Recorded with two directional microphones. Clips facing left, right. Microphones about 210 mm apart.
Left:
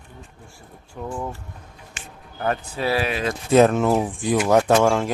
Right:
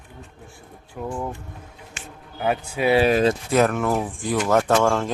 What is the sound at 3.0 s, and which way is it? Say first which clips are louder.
Speech: right 7 dB; 40° right (ahead or behind).